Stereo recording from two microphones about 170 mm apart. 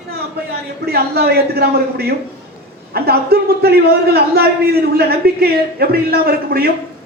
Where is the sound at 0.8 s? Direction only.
70° right (ahead or behind).